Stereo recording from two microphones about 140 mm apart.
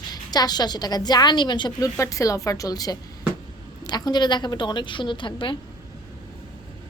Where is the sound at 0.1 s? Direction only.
30° left (ahead or behind).